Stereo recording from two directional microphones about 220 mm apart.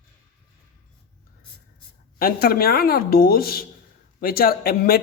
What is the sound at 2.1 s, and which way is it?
Speech, 45° left (ahead or behind).